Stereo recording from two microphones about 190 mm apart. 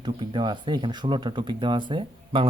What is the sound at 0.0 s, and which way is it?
Speech, 25° right (ahead or behind).